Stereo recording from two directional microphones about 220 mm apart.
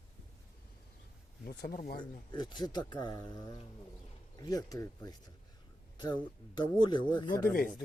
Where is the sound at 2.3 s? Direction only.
20° left (ahead or behind).